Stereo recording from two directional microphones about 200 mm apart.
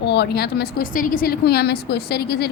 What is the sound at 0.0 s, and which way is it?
A woman's voice, 55° left (ahead or behind).